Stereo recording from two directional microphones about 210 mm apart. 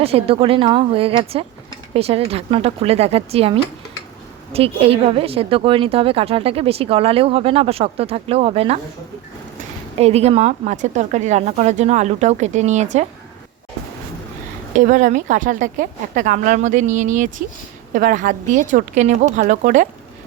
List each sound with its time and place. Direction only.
0.0 s a woman's voice: 25° right (ahead or behind)
14.8 s a woman's voice: 35° right (ahead or behind)